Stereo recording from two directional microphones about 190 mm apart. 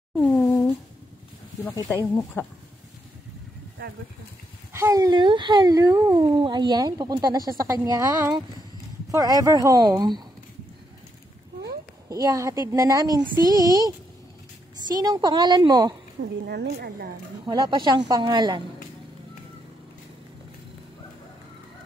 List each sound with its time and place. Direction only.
0.2 s a sound: 10° left (ahead or behind)
1.9 s speech: centre (ahead or behind)
4.7 s speech: 15° right (ahead or behind)
12.1 s a woman's voice: 20° right (ahead or behind)
16.2 s speech: 60° right (ahead or behind)
17.5 s speech: 20° right (ahead or behind)